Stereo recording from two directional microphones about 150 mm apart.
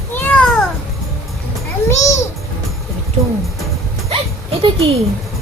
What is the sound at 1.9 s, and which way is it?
Babbling, 20° left (ahead or behind).